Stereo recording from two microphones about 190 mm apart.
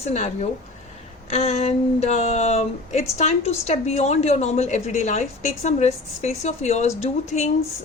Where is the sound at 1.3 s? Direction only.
35° left (ahead or behind).